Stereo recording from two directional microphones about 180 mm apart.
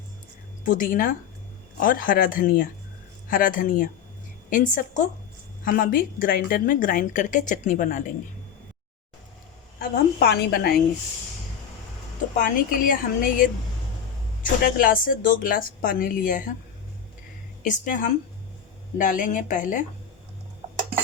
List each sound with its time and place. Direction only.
0.6 s a woman's voice: 50° left (ahead or behind)
9.7 s a woman's voice: 60° left (ahead or behind)
12.4 s a woman's voice: 50° left (ahead or behind)
17.6 s a woman's voice: 45° left (ahead or behind)